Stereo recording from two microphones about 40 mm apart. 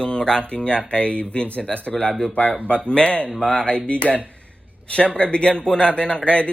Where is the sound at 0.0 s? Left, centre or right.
Left.